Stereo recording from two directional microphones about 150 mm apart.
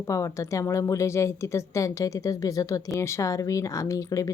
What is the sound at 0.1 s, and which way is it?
A woman's voice, 20° left (ahead or behind).